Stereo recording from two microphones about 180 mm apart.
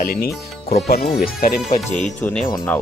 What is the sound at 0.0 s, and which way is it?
Speech, 55° left (ahead or behind).